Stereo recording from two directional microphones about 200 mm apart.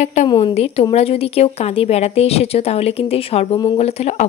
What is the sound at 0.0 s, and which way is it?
Speech, 35° left (ahead or behind).